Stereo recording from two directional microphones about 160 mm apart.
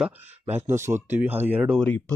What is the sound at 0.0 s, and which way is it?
Speech, 15° right (ahead or behind).